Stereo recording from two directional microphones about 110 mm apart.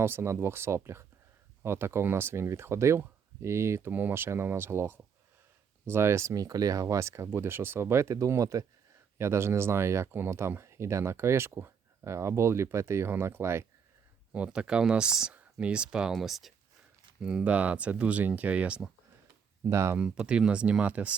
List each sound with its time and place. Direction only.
0.0 s speech: 20° right (ahead or behind)
14.3 s speech: 10° right (ahead or behind)
19.7 s speech: 25° right (ahead or behind)
20.0 s speech: 10° right (ahead or behind)